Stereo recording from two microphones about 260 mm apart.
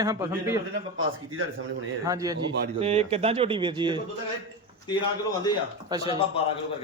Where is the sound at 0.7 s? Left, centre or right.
Right.